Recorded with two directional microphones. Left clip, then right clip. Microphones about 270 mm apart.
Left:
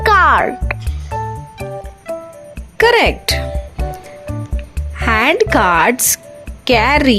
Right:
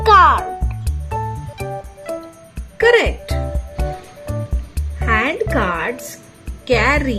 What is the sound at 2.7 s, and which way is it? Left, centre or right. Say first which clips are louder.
Music: left 2 dB; left.